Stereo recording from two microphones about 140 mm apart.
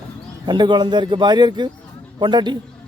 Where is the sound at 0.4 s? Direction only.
30° right (ahead or behind).